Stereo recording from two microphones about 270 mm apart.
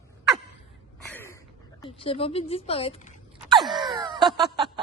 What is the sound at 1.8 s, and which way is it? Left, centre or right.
Speech, centre.